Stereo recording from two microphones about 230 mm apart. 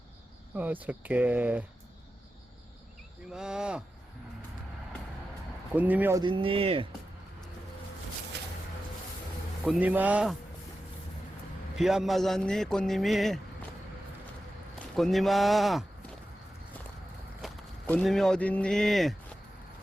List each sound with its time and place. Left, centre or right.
0.5 s speech: centre
3.3 s a man's voice: centre
5.7 s speech: centre; by 6.8 s right
8.3 s a sound: right
9.6 s a man's voice: centre
11.8 s a man's voice: centre
14.9 s a man's voice: centre
17.4 s speech: centre